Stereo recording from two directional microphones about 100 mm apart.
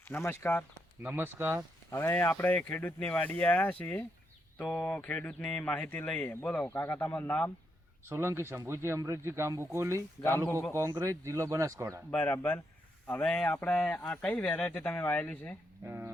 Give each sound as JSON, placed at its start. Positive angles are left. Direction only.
{"t": 0.1, "sound": "speech", "side_deg": 25}
{"t": 1.0, "sound": "speech", "side_deg": -20}
{"t": 1.9, "sound": "speech", "side_deg": 25}
{"t": 8.1, "sound": "speech", "side_deg": -25}
{"t": 12.1, "sound": "speech", "side_deg": 20}
{"t": 15.9, "sound": "a sound", "side_deg": -25}